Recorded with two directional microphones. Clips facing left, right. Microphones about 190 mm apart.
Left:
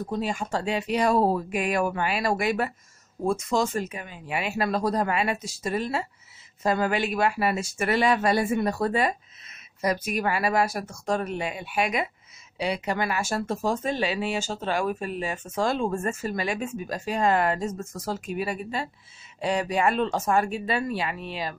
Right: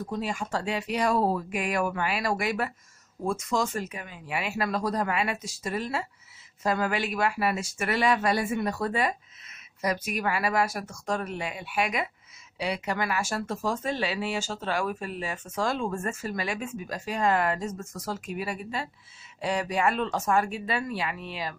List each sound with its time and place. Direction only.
0.0 s speech: 25° left (ahead or behind)